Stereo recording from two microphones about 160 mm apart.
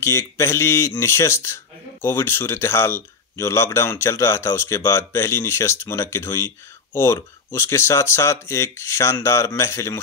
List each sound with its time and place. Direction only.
0.0 s speech: 15° left (ahead or behind)